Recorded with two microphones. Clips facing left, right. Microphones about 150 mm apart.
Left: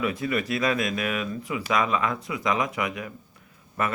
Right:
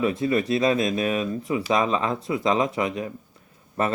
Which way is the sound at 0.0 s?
25° right (ahead or behind).